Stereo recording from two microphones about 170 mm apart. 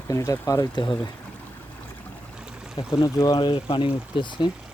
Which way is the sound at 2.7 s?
20° left (ahead or behind).